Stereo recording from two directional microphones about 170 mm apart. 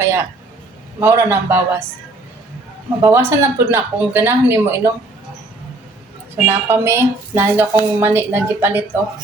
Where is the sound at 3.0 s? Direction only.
15° right (ahead or behind).